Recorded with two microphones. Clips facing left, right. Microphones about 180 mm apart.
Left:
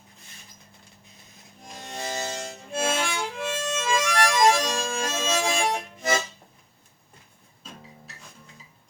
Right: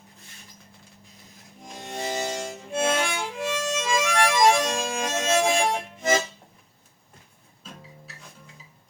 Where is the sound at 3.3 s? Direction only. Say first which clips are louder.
Right 2 dB; 15° right (ahead or behind).